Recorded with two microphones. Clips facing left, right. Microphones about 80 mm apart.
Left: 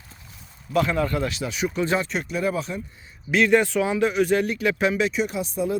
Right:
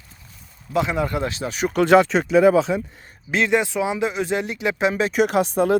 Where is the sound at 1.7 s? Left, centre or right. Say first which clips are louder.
Right 12 dB; right.